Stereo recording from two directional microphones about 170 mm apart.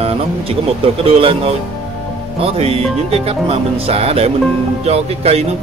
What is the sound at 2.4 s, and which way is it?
Speech, 35° right (ahead or behind).